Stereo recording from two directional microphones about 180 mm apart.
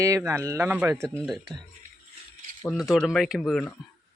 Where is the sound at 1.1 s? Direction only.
Centre (ahead or behind).